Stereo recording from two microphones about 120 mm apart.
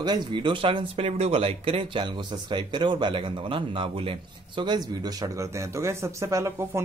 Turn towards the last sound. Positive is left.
turn(degrees=-25)  # may be behind; listen again after turning